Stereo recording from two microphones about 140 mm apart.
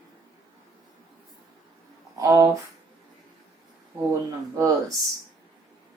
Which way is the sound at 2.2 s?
25° right (ahead or behind).